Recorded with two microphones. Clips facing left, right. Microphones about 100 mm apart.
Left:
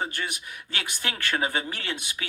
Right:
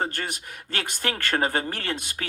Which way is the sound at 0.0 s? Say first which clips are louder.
Right 2 dB; 50° right (ahead or behind).